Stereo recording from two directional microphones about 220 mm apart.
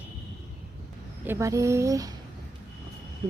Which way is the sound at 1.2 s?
10° right (ahead or behind).